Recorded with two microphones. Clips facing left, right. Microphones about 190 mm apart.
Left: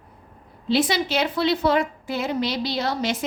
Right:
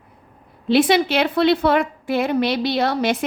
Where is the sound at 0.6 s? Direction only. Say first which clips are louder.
Right 6 dB; 60° right (ahead or behind).